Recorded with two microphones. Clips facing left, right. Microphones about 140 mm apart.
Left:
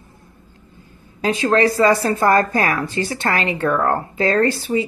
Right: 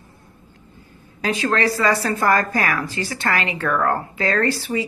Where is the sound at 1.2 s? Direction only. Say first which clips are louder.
Left 4 dB; 25° left (ahead or behind).